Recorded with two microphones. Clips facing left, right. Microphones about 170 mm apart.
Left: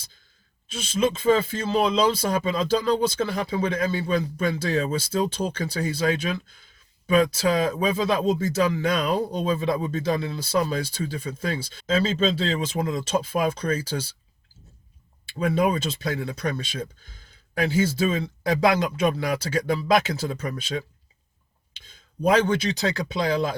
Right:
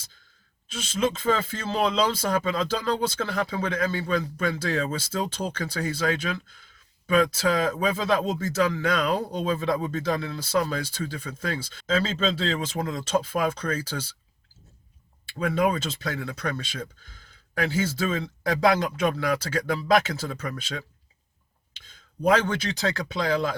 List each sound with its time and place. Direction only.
0.7 s speech: 15° left (ahead or behind)
15.3 s speech: 15° left (ahead or behind)
22.2 s speech: 15° left (ahead or behind)